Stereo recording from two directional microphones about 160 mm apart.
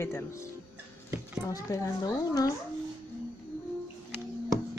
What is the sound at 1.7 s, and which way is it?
Speech, 20° left (ahead or behind).